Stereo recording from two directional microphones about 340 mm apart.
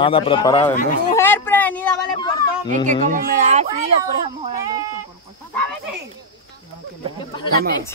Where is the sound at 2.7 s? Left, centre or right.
Right.